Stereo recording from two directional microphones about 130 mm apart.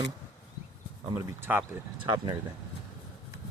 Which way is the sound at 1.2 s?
15° right (ahead or behind).